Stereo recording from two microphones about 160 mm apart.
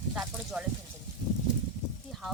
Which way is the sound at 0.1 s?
5° right (ahead or behind).